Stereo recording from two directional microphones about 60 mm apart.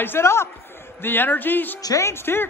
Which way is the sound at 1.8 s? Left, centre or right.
Left.